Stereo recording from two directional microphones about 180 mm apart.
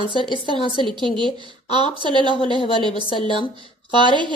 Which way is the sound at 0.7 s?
25° right (ahead or behind).